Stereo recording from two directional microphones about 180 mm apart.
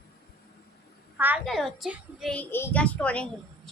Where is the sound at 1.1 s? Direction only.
10° right (ahead or behind).